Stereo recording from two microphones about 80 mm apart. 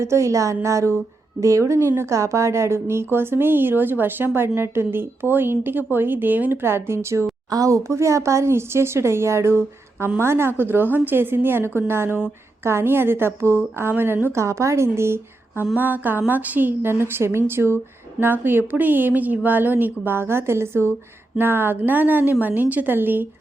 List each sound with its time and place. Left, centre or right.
0.0 s speech: right
14.3 s speech: right